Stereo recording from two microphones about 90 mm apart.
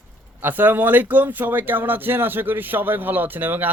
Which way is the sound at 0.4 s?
20° right (ahead or behind).